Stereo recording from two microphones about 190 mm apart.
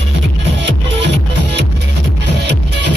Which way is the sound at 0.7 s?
70° right (ahead or behind).